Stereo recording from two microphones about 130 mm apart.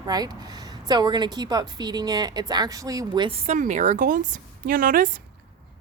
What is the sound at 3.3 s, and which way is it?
Speech, 65° right (ahead or behind).